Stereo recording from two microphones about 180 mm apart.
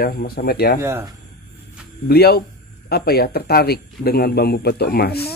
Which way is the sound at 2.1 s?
60° left (ahead or behind).